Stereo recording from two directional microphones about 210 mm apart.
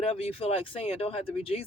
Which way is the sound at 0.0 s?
25° left (ahead or behind).